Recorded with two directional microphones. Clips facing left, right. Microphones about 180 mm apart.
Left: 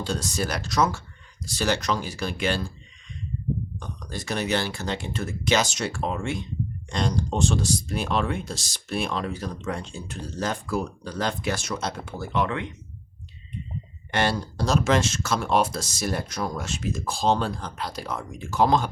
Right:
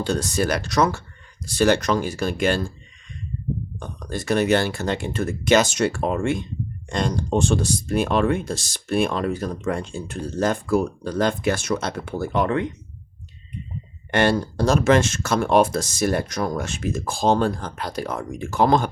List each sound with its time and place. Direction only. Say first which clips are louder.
0.0 s speech: right 6 dB; 55° right (ahead or behind)
3.8 s speech: right 5 dB; 50° right (ahead or behind)
12.3 s speech: right 4 dB; 40° right (ahead or behind)
14.1 s speech: right 6 dB; 55° right (ahead or behind)